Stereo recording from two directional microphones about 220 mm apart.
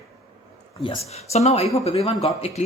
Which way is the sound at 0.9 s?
30° left (ahead or behind).